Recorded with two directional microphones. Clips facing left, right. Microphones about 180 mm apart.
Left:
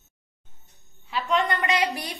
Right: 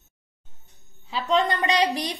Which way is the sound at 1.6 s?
20° right (ahead or behind).